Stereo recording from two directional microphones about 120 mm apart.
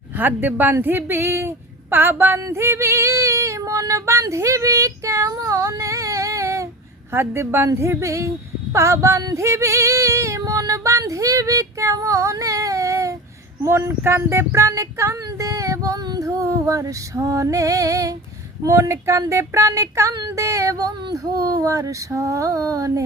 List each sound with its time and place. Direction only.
0.2 s a woman's voice: 15° right (ahead or behind)
7.1 s female singing: 20° right (ahead or behind)